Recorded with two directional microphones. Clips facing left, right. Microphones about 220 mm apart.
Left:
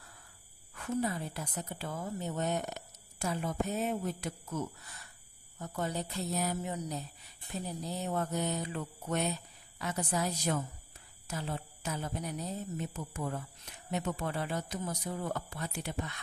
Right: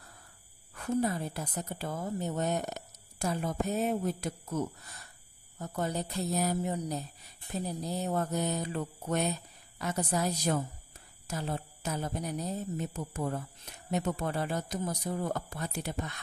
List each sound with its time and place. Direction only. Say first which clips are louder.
0.7 s a woman's voice: right 3 dB; 40° right (ahead or behind)